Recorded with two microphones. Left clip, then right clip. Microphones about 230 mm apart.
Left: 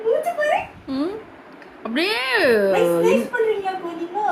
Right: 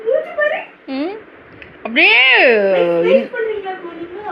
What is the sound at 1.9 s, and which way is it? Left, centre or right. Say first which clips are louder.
Speech: right 11 dB; left.